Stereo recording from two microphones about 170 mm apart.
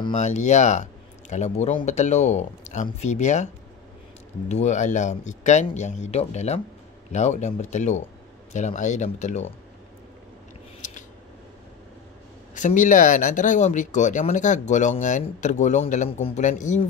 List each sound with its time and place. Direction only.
0.1 s speech: 45° left (ahead or behind)
4.5 s speech: 45° left (ahead or behind)
12.5 s speech: 50° left (ahead or behind)